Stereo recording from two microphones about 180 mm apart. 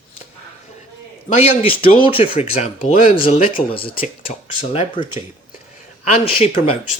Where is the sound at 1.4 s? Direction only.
30° left (ahead or behind).